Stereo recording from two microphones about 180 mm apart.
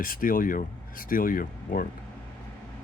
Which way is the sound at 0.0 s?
50° left (ahead or behind).